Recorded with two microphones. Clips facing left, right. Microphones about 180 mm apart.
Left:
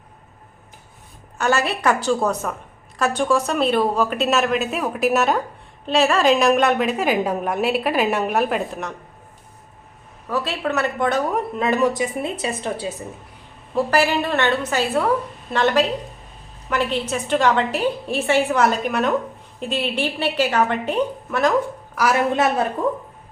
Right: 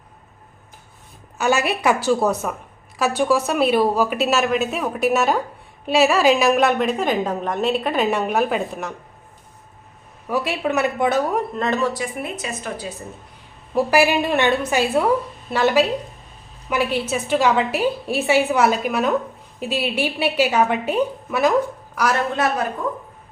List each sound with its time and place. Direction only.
1.4 s a woman's voice: 10° right (ahead or behind)
10.2 s a woman's voice: 10° right (ahead or behind)
11.5 s a woman's voice: 10° left (ahead or behind); by 13.1 s 25° left (ahead or behind)
13.7 s a woman's voice: 10° right (ahead or behind)
21.9 s a woman's voice: 5° left (ahead or behind)
22.3 s a woman's voice: 20° left (ahead or behind)